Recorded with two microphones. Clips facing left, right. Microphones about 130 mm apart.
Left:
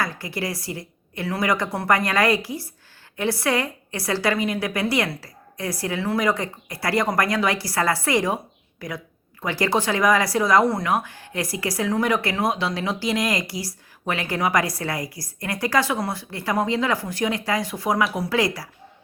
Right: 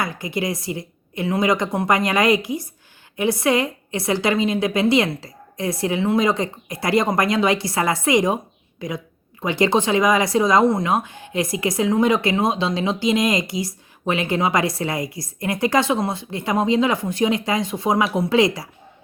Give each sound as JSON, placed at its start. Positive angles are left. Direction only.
{"t": 0.0, "sound": "speech", "side_deg": -20}